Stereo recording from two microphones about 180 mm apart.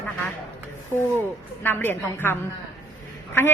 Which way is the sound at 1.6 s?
10° left (ahead or behind).